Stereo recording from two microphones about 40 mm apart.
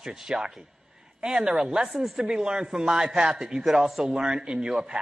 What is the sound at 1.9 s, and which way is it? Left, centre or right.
Speech, centre.